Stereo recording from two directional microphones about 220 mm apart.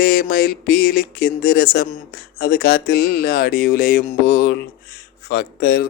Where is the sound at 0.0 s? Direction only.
40° left (ahead or behind).